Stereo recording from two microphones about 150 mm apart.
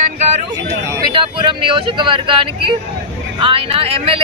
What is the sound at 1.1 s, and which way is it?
Speech, 35° right (ahead or behind).